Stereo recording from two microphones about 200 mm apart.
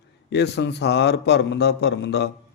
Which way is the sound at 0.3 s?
60° left (ahead or behind).